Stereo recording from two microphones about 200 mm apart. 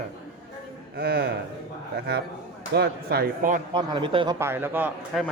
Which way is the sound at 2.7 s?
50° right (ahead or behind).